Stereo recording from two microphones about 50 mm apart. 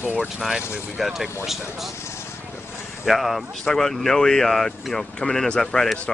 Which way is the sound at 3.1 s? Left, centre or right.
Centre.